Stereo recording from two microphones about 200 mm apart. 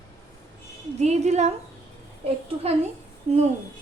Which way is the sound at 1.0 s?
35° right (ahead or behind).